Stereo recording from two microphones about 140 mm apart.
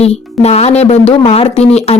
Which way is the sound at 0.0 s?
50° left (ahead or behind).